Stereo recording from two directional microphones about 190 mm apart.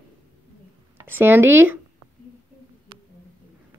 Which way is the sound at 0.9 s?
10° right (ahead or behind).